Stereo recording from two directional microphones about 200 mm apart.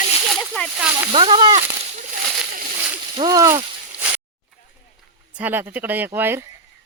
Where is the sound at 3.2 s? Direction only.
15° right (ahead or behind).